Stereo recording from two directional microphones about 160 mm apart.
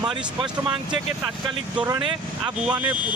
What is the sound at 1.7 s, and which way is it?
Speech, 10° right (ahead or behind).